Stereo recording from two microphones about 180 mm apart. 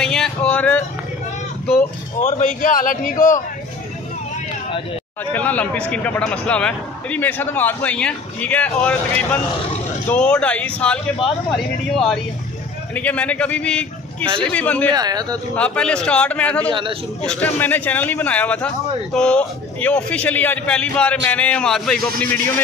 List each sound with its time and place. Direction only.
0.0 s a sound: 5° left (ahead or behind)
2.1 s a man's voice: 45° left (ahead or behind)
5.2 s speech: 10° left (ahead or behind)
15.0 s speech: 20° right (ahead or behind)
15.5 s speech: 5° left (ahead or behind)